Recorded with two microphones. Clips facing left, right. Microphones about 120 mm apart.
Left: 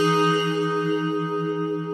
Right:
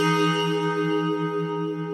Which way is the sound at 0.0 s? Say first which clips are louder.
Left 2 dB; 15° left (ahead or behind).